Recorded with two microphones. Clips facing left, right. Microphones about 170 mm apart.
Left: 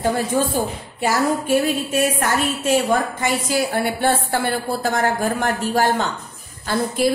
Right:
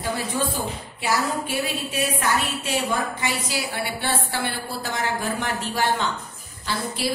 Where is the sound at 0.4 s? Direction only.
45° left (ahead or behind).